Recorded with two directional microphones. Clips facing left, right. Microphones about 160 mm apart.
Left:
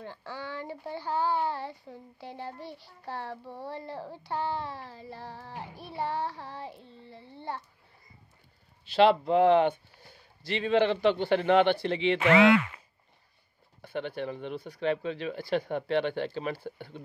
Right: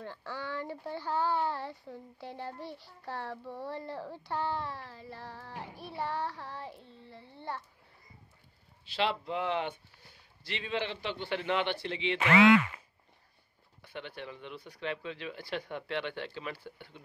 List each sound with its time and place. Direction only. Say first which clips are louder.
0.0 s speech: left 1 dB; 15° left (ahead or behind)
4.6 s child singing: left 2 dB; 25° left (ahead or behind)
5.3 s speech: left 2 dB; 15° left (ahead or behind)
5.9 s child singing: left 3 dB; 25° left (ahead or behind)
8.9 s speech: left 11 dB; 55° left (ahead or behind)
13.7 s speech: left 9 dB; 50° left (ahead or behind)